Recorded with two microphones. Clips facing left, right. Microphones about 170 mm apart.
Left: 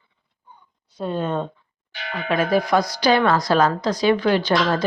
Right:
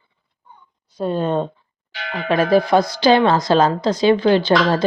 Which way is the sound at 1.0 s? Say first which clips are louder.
Right 4 dB; 35° right (ahead or behind).